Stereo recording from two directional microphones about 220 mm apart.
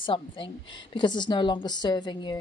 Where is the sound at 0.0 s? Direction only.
20° left (ahead or behind).